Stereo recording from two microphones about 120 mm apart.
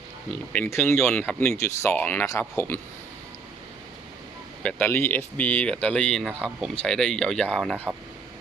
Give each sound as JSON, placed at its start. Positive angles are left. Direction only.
{"t": 0.3, "sound": "speech", "side_deg": 15}
{"t": 0.9, "sound": "speech", "side_deg": 5}
{"t": 1.4, "sound": "speech", "side_deg": 20}
{"t": 4.6, "sound": "speech", "side_deg": 15}